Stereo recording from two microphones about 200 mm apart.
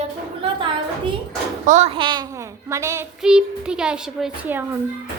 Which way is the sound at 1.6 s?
35° right (ahead or behind).